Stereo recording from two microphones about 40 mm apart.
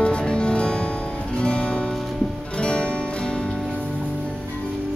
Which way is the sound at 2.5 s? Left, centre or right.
Left.